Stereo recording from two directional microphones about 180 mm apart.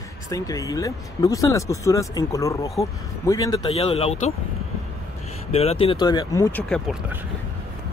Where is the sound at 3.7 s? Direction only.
35° left (ahead or behind).